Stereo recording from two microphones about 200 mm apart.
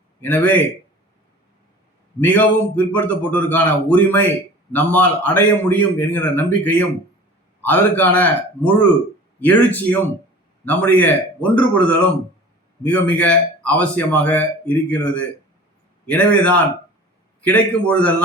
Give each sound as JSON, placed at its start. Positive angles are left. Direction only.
{"t": 0.2, "sound": "speech", "side_deg": 10}
{"t": 2.2, "sound": "speech", "side_deg": 10}